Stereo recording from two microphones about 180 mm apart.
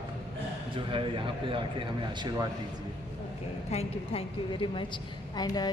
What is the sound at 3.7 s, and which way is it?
A woman's voice, 35° left (ahead or behind).